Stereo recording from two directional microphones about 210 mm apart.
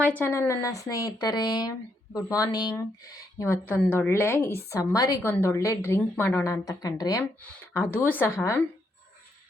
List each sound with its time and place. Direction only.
0.0 s a woman's voice: 10° left (ahead or behind)